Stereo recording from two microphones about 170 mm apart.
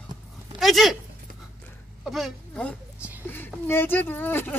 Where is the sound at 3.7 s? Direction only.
10° left (ahead or behind).